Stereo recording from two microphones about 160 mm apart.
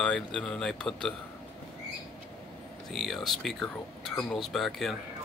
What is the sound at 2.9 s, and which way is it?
Speech, centre (ahead or behind).